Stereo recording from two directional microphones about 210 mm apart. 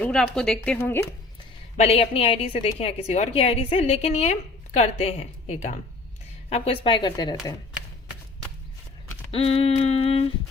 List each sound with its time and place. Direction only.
0.0 s speech: 5° left (ahead or behind)
1.7 s a woman's voice: 30° left (ahead or behind)
9.3 s a woman's voice: 30° left (ahead or behind)